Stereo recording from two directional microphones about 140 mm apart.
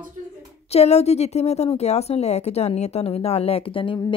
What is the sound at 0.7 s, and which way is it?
Speech, 50° left (ahead or behind).